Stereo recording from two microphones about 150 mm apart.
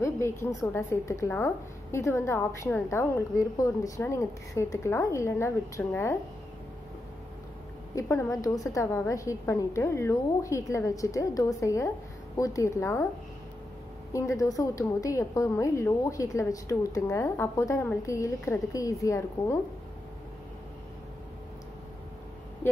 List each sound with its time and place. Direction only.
0.0 s a woman's voice: 20° left (ahead or behind)
7.9 s a woman's voice: 20° left (ahead or behind)
14.1 s a woman's voice: 20° left (ahead or behind)
22.6 s a sound: 15° left (ahead or behind)